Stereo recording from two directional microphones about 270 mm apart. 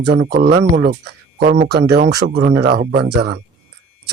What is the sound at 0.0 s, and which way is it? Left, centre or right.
Speech, right.